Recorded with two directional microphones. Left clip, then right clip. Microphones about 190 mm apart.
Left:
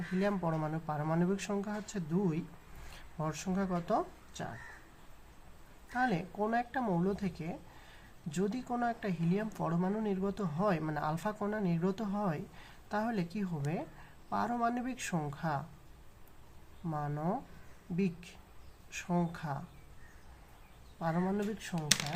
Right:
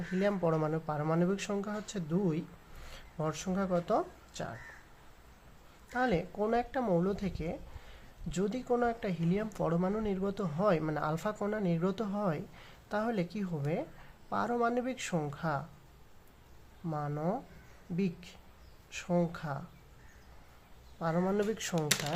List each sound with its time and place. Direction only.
0.2 s speech: 15° right (ahead or behind)
5.9 s speech: 15° right (ahead or behind)
16.9 s speech: 10° right (ahead or behind)
21.0 s speech: 10° right (ahead or behind)
21.2 s speech: 30° right (ahead or behind)